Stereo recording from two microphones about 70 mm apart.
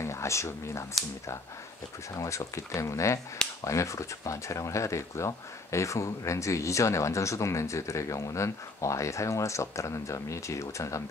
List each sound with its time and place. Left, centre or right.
0.0 s speech: left
2.1 s speech: left